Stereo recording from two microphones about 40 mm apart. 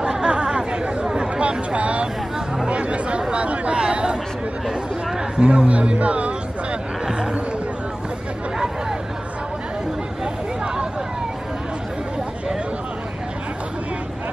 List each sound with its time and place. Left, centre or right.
0.0 s chatter: right
1.8 s vehicle: right
2.7 s speech: right
5.4 s speech: right
10.2 s a sound: right